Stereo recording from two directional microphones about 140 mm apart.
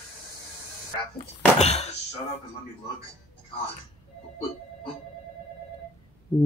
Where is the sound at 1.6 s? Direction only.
50° left (ahead or behind).